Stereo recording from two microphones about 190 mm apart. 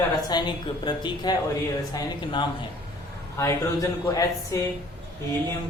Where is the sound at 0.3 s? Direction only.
25° left (ahead or behind).